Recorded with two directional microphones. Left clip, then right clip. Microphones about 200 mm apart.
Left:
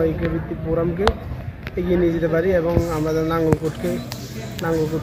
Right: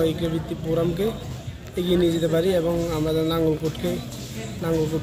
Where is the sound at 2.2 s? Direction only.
5° right (ahead or behind).